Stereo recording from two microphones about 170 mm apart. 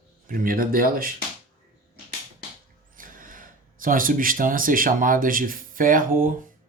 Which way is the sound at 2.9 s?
55° right (ahead or behind).